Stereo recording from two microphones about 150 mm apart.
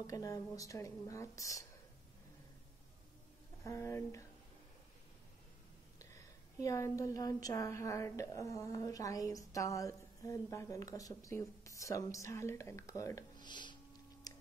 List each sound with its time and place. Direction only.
0.0 s a woman's voice: 20° left (ahead or behind)
3.6 s a woman's voice: 20° left (ahead or behind)
5.9 s a woman's voice: 20° left (ahead or behind)
14.3 s a sound: 25° left (ahead or behind)